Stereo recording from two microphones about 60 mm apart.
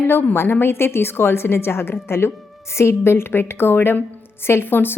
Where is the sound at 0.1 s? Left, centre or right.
Left.